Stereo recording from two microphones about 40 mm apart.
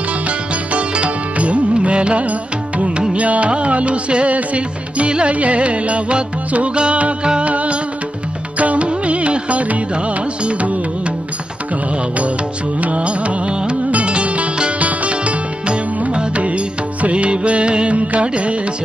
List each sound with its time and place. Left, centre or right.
0.3 s music: right
12.8 s music: right